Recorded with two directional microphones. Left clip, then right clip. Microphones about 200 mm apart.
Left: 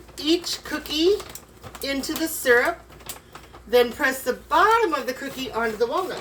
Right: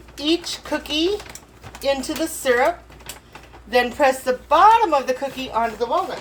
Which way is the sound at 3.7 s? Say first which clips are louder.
Right 2 dB; 35° right (ahead or behind).